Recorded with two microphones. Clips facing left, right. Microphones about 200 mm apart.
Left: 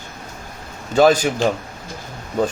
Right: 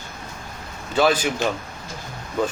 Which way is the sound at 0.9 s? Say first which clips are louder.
Left 5 dB; 45° left (ahead or behind).